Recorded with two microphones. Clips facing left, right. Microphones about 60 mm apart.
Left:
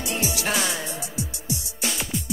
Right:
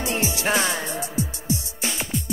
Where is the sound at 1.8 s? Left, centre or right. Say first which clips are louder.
Even; right.